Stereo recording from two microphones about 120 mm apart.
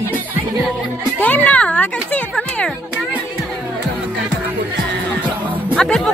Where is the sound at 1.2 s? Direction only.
15° left (ahead or behind).